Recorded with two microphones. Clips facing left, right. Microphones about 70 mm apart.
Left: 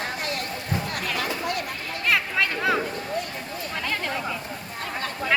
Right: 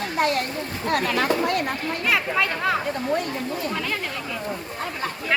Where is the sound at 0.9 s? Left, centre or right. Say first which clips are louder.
Right 7 dB; right.